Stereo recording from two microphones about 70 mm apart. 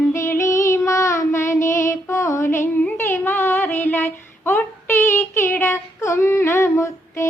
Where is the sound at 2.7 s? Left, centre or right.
Left.